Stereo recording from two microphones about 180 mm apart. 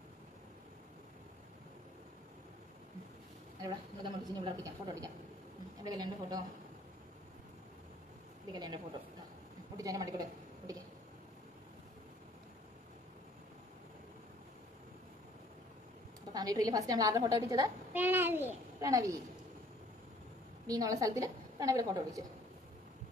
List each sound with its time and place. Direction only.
3.6 s a woman's voice: 25° right (ahead or behind)
9.8 s a woman's voice: 20° right (ahead or behind)
10.7 s a sound: 20° right (ahead or behind)
16.3 s a woman's voice: 20° right (ahead or behind)
20.6 s a woman's voice: 20° right (ahead or behind)